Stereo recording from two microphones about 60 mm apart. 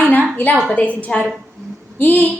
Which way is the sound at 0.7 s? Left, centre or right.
Left.